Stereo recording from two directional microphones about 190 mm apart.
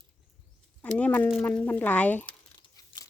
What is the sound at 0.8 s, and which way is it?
Speech, 5° left (ahead or behind).